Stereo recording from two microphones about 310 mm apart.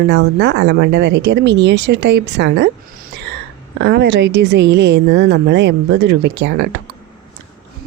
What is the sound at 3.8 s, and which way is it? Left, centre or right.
Speech, right.